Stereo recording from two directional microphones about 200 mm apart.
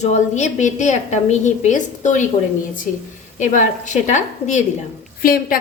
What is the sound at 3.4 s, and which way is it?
A woman's voice, 40° left (ahead or behind).